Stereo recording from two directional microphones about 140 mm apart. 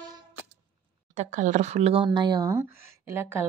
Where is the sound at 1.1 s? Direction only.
60° right (ahead or behind); by 2.0 s 45° right (ahead or behind).